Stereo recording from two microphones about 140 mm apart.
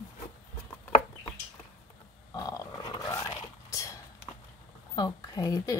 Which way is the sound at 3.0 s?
20° left (ahead or behind).